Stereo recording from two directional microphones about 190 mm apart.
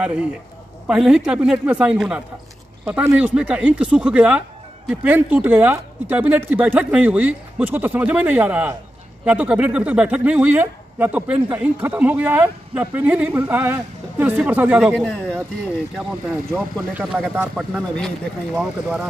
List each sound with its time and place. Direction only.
0.8 s a man's voice: 5° right (ahead or behind)